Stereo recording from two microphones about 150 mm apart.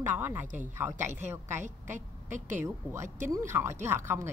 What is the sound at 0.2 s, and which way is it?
Speech, 15° right (ahead or behind).